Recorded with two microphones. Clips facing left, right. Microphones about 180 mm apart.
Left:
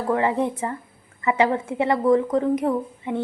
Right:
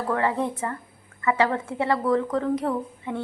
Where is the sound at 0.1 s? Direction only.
15° left (ahead or behind).